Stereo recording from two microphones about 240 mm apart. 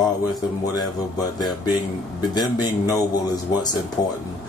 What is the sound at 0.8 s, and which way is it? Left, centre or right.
Speech, centre.